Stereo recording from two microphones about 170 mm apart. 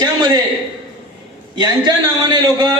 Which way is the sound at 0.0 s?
25° right (ahead or behind).